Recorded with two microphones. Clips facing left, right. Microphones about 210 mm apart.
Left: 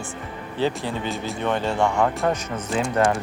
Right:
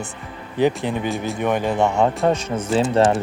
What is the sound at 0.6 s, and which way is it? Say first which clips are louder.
Speech: right 5 dB; 15° right (ahead or behind).